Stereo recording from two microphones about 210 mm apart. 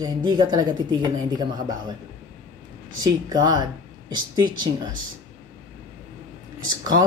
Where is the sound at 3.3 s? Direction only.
20° right (ahead or behind).